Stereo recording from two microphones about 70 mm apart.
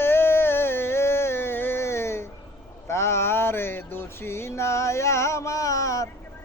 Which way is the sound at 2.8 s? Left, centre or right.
Left.